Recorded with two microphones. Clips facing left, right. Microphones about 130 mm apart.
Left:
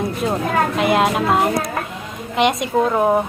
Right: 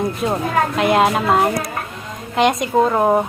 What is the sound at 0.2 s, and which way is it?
A woman's voice, centre (ahead or behind).